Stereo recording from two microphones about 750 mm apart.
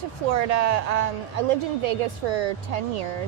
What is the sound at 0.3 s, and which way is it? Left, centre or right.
A woman's voice, right.